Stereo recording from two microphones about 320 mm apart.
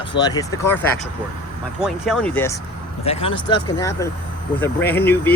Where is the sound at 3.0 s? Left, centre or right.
Centre.